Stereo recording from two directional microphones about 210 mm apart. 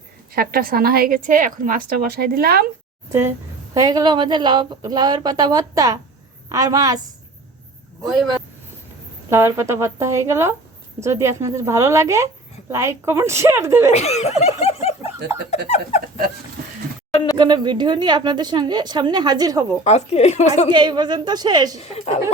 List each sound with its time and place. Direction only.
0.3 s a woman's voice: 45° right (ahead or behind)
3.1 s a woman's voice: 15° right (ahead or behind)
8.0 s speech: centre (ahead or behind)
9.3 s a woman's voice: 15° right (ahead or behind)
13.9 s a woman's voice: 30° left (ahead or behind)
17.1 s a sound: 20° left (ahead or behind)
17.3 s a woman's voice: 20° right (ahead or behind)
19.8 s a woman's voice: 30° left (ahead or behind)
20.7 s a woman's voice: 20° right (ahead or behind)
21.8 s speech: 30° left (ahead or behind)